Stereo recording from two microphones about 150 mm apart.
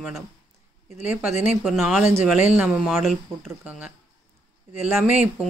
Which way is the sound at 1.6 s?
Centre (ahead or behind).